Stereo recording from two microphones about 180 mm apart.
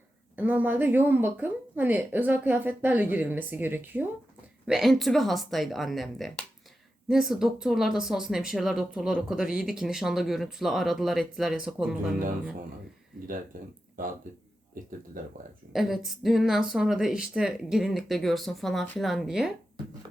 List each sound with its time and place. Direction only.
0.3 s a woman's voice: 10° right (ahead or behind)
15.2 s speech: 50° right (ahead or behind)
15.7 s speech: centre (ahead or behind)